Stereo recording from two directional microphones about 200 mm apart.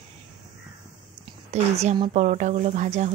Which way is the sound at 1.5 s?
35° right (ahead or behind).